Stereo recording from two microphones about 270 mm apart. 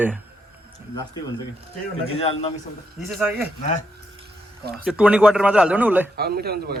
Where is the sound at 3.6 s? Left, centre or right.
Left.